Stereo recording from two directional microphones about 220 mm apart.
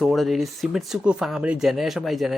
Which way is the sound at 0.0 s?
Centre (ahead or behind).